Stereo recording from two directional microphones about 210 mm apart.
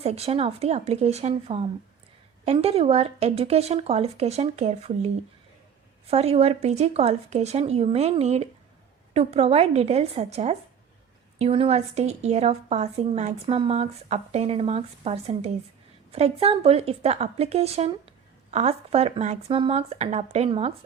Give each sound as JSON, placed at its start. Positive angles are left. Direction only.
{"t": 0.0, "sound": "a woman's voice", "side_deg": -30}
{"t": 6.1, "sound": "a woman's voice", "side_deg": -30}